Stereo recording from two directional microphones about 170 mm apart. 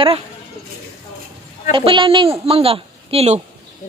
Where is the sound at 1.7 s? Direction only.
30° right (ahead or behind).